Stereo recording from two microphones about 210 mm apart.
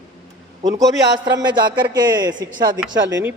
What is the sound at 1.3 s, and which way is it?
Speech, 20° right (ahead or behind).